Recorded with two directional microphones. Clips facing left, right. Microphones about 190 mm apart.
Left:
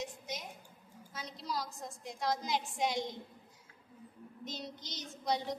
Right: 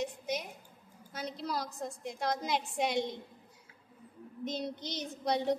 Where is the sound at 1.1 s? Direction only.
60° right (ahead or behind).